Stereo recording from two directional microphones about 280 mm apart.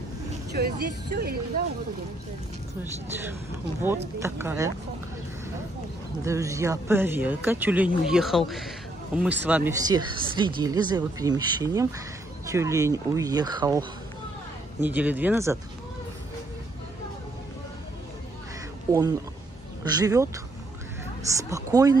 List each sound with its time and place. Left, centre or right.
0.6 s speech: right
4.2 s speech: centre
6.2 s speech: centre
18.9 s speech: centre
21.4 s speech: centre